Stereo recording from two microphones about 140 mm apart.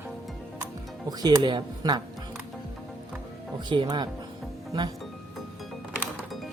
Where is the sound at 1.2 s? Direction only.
30° right (ahead or behind).